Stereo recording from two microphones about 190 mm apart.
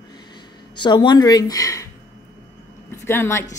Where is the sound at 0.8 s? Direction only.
25° left (ahead or behind).